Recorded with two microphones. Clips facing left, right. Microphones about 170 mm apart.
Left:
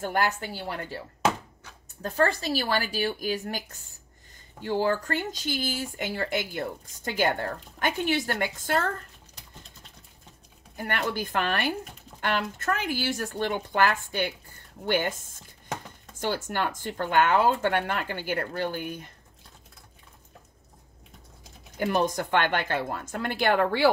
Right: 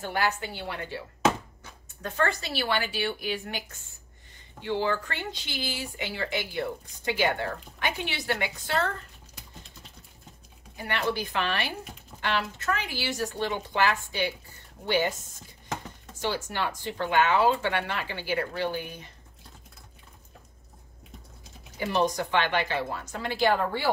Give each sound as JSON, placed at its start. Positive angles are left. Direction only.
{"t": 0.0, "sound": "speech", "side_deg": 50}
{"t": 10.8, "sound": "speech", "side_deg": 50}
{"t": 16.2, "sound": "speech", "side_deg": 50}
{"t": 21.7, "sound": "speech", "side_deg": 55}